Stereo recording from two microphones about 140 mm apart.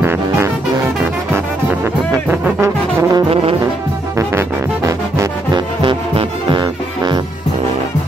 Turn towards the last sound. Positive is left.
turn(degrees=-35)  # may be behind; listen again after turning